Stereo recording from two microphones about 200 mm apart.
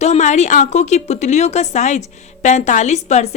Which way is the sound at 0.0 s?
35° left (ahead or behind).